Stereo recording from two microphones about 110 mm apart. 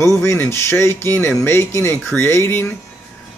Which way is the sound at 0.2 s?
25° left (ahead or behind).